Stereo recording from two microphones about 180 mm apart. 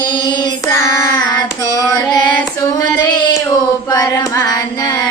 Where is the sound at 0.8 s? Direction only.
15° left (ahead or behind).